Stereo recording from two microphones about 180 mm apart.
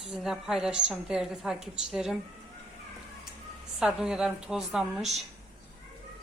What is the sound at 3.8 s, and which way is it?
A woman's voice, 5° right (ahead or behind).